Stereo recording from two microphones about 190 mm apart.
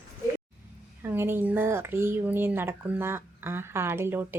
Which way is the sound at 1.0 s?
10° right (ahead or behind).